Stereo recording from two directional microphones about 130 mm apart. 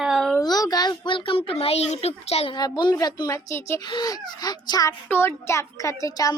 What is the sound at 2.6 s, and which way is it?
A child's voice, 35° left (ahead or behind).